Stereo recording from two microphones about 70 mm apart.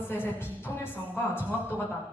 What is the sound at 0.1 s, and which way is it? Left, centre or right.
Speech, left.